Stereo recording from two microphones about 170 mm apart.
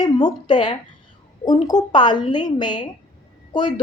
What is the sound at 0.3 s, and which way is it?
A woman's voice, 25° left (ahead or behind).